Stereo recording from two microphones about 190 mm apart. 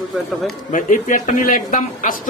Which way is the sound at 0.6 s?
45° left (ahead or behind).